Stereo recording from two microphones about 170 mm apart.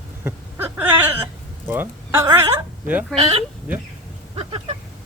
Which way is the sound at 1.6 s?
10° right (ahead or behind).